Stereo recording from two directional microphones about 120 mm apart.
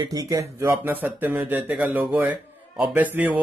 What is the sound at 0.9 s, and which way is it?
Speech, 15° right (ahead or behind).